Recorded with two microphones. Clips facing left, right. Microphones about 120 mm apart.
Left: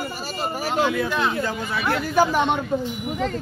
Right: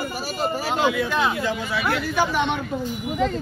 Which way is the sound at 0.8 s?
5° right (ahead or behind).